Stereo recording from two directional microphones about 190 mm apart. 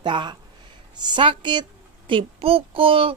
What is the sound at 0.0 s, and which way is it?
A woman's voice, 25° right (ahead or behind).